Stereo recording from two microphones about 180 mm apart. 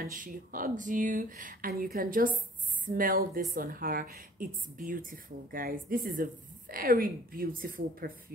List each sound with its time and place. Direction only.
0.0 s a woman's voice: 50° right (ahead or behind)